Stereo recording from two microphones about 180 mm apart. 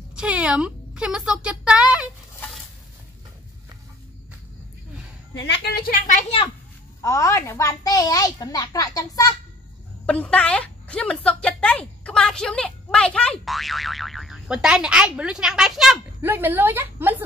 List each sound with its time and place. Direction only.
0.1 s speech: 5° right (ahead or behind)
5.3 s a woman's voice: 75° left (ahead or behind); by 6.5 s 35° left (ahead or behind)
7.0 s a child's voice: 15° left (ahead or behind)
10.0 s a woman's voice: 5° left (ahead or behind); by 17.2 s 10° right (ahead or behind)